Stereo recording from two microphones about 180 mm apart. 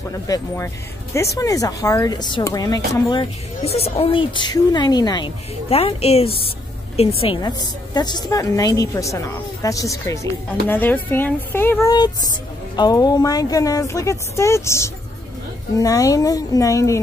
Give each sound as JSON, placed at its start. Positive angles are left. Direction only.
{"t": 1.1, "sound": "a woman's voice", "side_deg": 15}
{"t": 7.4, "sound": "speech", "side_deg": 25}